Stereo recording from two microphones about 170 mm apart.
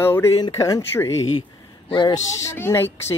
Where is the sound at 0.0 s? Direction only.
15° left (ahead or behind).